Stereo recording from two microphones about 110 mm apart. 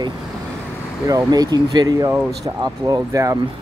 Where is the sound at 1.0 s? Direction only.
35° right (ahead or behind).